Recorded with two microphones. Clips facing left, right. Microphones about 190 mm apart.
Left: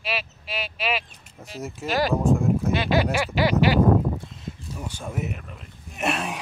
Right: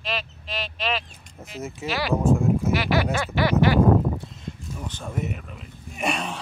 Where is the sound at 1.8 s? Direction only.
45° left (ahead or behind).